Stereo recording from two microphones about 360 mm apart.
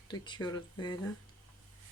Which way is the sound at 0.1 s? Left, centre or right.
Centre.